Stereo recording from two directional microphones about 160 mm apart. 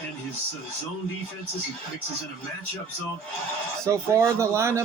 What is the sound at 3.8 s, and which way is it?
Speech, 20° right (ahead or behind).